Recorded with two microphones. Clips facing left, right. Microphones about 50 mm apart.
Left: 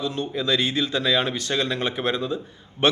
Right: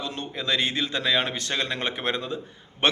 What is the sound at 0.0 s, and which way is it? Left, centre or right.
A man's voice, right.